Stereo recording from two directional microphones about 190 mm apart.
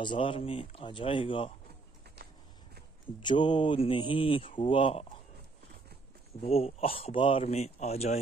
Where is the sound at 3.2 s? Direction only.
25° left (ahead or behind).